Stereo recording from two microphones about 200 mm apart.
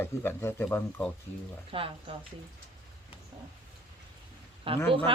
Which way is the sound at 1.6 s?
25° right (ahead or behind).